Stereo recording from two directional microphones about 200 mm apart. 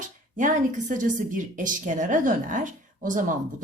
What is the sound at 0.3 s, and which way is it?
Speech, 40° right (ahead or behind).